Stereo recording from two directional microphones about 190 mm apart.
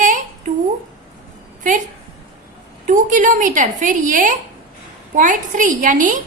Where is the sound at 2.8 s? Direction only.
45° right (ahead or behind).